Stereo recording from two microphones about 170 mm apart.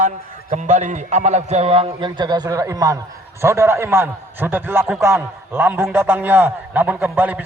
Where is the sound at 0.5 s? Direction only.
45° right (ahead or behind).